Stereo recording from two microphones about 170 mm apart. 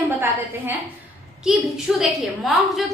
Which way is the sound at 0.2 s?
10° right (ahead or behind).